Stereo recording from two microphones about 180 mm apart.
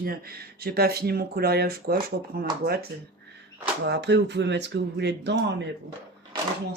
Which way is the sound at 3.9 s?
70° right (ahead or behind).